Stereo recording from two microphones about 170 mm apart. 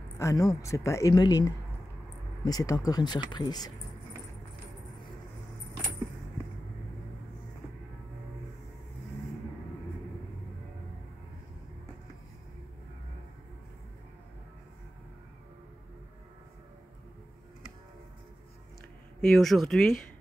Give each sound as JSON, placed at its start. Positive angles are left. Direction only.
{"t": 0.2, "sound": "a woman's voice", "side_deg": 20}
{"t": 19.2, "sound": "speech", "side_deg": 0}